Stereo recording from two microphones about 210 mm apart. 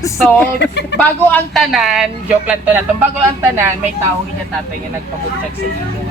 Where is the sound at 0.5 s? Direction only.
55° left (ahead or behind).